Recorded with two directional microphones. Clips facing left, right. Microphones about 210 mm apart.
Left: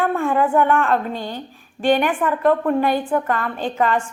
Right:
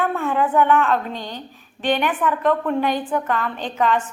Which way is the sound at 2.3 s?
10° left (ahead or behind).